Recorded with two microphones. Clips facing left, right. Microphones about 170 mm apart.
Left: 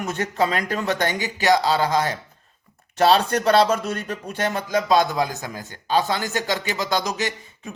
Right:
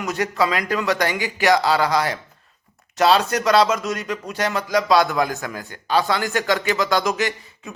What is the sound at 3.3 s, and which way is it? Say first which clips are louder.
Speech: even; 30° left (ahead or behind).